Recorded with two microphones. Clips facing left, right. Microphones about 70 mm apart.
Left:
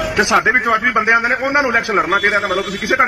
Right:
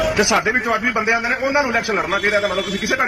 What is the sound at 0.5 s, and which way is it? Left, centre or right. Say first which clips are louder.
A man's voice: left 4 dB; left.